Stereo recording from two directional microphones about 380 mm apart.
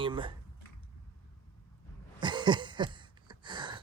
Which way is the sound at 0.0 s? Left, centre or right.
Centre.